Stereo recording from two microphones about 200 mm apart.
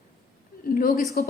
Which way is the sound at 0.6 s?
45° left (ahead or behind).